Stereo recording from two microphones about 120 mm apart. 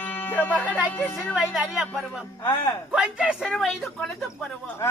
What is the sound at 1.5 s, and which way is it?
Speech, centre (ahead or behind).